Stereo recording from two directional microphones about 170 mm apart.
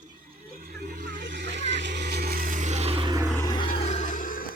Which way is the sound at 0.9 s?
50° right (ahead or behind).